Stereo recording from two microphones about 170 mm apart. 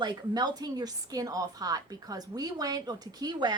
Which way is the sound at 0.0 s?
25° right (ahead or behind).